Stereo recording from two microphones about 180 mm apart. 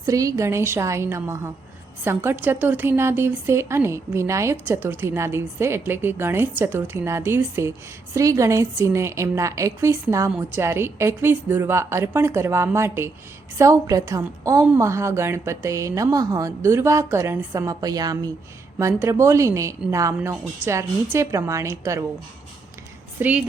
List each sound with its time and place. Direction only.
0.0 s a woman's voice: 20° right (ahead or behind)
23.2 s a woman's voice: 10° right (ahead or behind)